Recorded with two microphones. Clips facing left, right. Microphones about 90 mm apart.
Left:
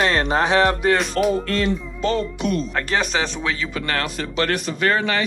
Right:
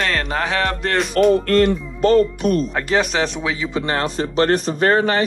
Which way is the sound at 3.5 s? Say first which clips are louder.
Right 3 dB; 20° right (ahead or behind).